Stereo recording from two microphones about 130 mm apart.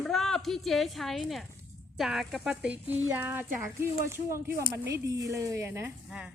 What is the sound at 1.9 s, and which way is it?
Speech, centre (ahead or behind).